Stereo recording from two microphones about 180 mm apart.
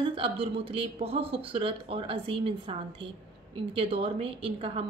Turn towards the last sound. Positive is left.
turn(degrees=-30)  # may be behind; listen again after turning